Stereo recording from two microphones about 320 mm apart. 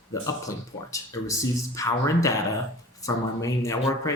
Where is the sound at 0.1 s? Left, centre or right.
Centre.